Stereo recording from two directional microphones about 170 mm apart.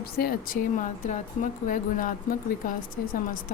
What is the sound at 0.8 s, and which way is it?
Speech, 45° left (ahead or behind).